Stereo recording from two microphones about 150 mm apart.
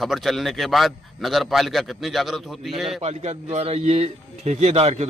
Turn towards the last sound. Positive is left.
turn(degrees=-45)  # may be behind; listen again after turning